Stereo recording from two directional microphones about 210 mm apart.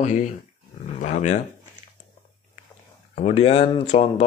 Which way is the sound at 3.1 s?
30° left (ahead or behind).